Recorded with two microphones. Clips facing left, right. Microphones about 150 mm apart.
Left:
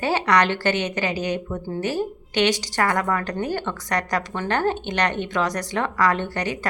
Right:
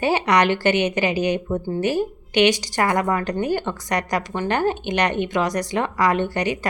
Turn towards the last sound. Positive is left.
turn(degrees=-15)  # may be behind; listen again after turning